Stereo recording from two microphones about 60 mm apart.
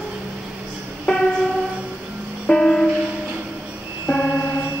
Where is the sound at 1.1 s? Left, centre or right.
Centre.